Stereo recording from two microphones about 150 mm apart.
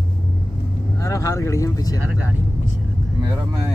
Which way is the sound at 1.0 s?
20° left (ahead or behind).